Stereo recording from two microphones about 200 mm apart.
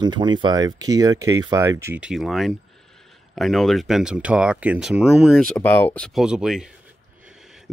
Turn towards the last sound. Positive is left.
turn(degrees=0)  # may be behind; listen again after turning